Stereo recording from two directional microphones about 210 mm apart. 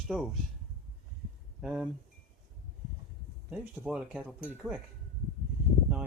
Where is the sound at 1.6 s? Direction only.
Centre (ahead or behind).